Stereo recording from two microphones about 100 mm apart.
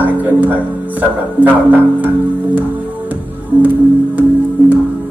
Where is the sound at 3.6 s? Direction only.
20° right (ahead or behind).